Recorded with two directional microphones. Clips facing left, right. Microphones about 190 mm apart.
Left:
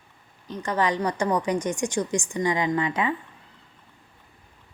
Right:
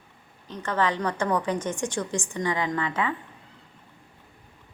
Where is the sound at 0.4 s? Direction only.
15° left (ahead or behind).